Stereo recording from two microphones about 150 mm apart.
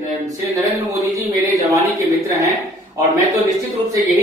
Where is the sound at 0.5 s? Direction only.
20° right (ahead or behind).